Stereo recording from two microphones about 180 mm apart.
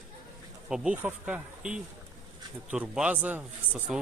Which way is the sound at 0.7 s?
5° right (ahead or behind).